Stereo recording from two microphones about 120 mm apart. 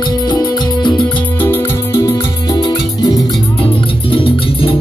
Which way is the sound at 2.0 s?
35° left (ahead or behind).